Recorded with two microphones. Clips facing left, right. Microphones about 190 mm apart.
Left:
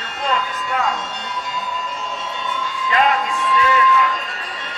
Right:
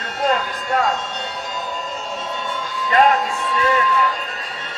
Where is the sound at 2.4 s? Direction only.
40° right (ahead or behind).